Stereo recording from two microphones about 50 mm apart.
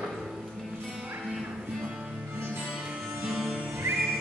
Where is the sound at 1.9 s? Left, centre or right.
Centre.